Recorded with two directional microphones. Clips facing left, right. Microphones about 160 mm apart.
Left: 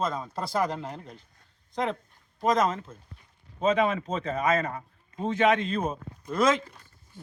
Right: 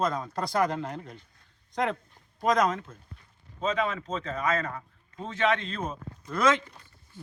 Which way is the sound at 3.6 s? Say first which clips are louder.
Left 5 dB; 15° left (ahead or behind).